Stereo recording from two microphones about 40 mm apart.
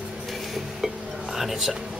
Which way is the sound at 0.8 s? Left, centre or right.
Centre.